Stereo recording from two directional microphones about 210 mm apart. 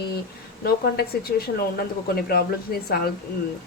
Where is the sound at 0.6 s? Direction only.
45° left (ahead or behind).